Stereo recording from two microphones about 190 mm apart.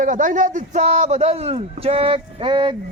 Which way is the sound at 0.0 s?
40° right (ahead or behind).